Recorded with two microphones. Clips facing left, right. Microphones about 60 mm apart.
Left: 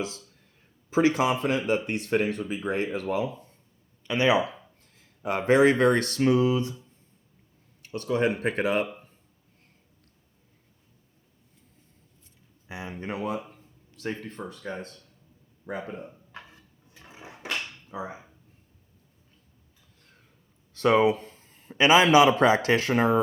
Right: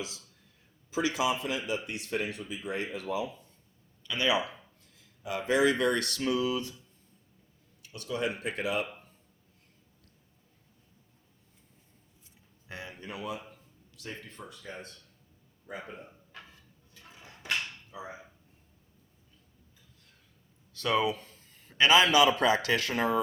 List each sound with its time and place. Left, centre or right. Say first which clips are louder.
0.9 s speech: left 7 dB; left
4.0 s speech: left 6 dB; left
4.8 s speech: left 8 dB; left
7.8 s speech: left 8 dB; left
12.6 s speech: left 4 dB; centre
12.9 s a man's voice: left 8 dB; left
17.9 s speech: left 8 dB; left
20.7 s speech: left 8 dB; left